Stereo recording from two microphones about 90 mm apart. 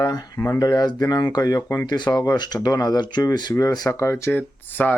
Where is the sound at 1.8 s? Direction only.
50° left (ahead or behind).